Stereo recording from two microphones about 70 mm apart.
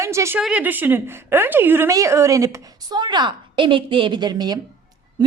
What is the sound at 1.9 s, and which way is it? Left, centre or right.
Speech, right.